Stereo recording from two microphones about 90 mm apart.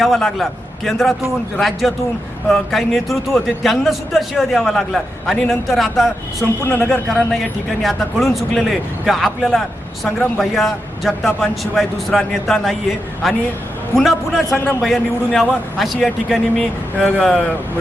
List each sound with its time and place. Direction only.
0.0 s speech: 5° left (ahead or behind)
6.7 s speech: 20° left (ahead or behind)
7.1 s speech: 5° left (ahead or behind)